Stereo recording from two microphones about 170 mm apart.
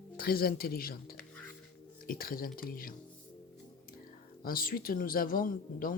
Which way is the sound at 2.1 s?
60° left (ahead or behind).